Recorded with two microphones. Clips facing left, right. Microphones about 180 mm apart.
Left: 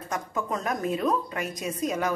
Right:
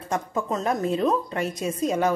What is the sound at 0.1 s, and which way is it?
A woman's voice, 25° right (ahead or behind).